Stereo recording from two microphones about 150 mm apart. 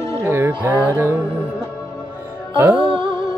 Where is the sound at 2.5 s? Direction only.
10° right (ahead or behind).